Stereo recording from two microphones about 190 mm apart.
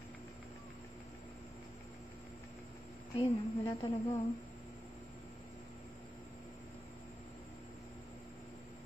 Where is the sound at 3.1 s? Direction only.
20° left (ahead or behind).